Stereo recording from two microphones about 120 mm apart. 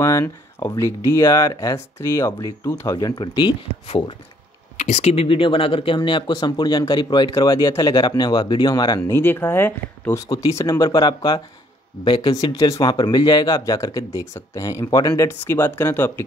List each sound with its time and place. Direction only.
0.0 s speech: 25° left (ahead or behind)
4.7 s speech: 65° left (ahead or behind); by 9.1 s 35° left (ahead or behind)
9.1 s speech: 15° left (ahead or behind)